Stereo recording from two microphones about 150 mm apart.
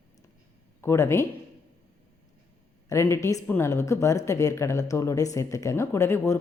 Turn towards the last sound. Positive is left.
turn(degrees=15)  # may be behind; listen again after turning